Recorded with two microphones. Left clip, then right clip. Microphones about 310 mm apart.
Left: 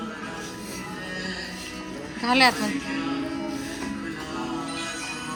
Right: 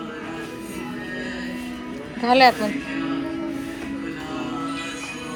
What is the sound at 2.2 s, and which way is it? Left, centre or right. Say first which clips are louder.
Speech: right 5 dB; centre.